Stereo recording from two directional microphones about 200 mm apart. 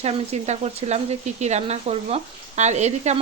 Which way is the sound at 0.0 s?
30° right (ahead or behind).